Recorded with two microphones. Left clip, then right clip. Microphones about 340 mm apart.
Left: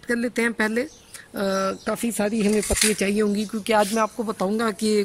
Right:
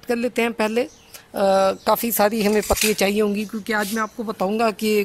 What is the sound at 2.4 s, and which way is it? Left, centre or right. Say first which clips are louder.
Speech: right 3 dB; right.